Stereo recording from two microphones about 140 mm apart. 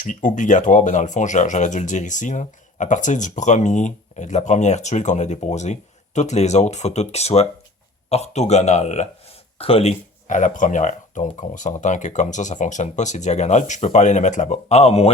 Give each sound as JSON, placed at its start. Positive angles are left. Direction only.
{"t": 0.0, "sound": "speech", "side_deg": 65}
{"t": 9.6, "sound": "speech", "side_deg": 45}
{"t": 10.2, "sound": "speech", "side_deg": 65}